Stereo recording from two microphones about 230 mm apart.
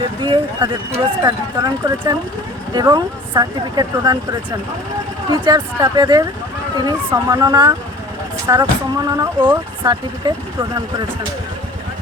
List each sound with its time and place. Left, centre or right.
0.2 s speech: centre